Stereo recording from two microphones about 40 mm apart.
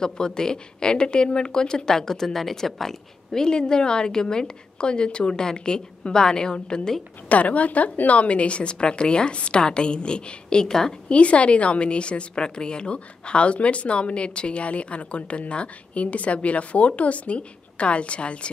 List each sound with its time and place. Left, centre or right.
0.0 s a woman's voice: centre
3.4 s a woman's voice: centre
7.2 s a woman's voice: left; by 11.0 s centre
11.1 s a woman's voice: left